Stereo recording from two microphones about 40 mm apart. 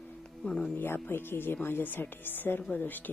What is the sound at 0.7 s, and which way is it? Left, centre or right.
A woman's voice, left.